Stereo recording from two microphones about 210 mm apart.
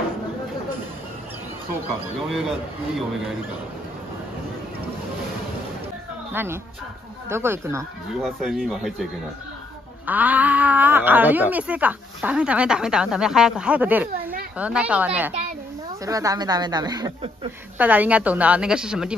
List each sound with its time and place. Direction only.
2.2 s speech: centre (ahead or behind)
6.3 s speech: 10° right (ahead or behind)
8.2 s speech: centre (ahead or behind); by 17.5 s 20° right (ahead or behind)
17.7 s speech: 5° right (ahead or behind)